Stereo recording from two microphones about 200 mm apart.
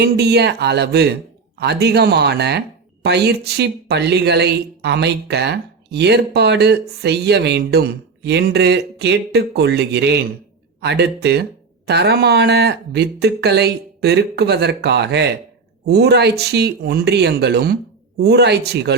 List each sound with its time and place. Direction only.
0.0 s speech: 55° right (ahead or behind)